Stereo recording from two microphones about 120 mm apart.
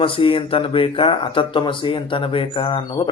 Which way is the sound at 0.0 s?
50° left (ahead or behind).